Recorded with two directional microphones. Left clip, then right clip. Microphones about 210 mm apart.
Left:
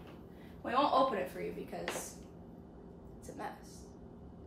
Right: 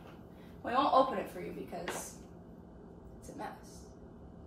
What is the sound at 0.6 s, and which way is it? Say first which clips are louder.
A woman's voice: right 2 dB; centre (ahead or behind).